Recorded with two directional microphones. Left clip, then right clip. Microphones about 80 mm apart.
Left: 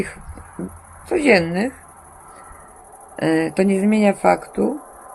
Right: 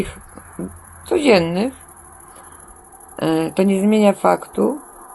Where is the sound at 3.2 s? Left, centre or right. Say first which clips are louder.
Even; left.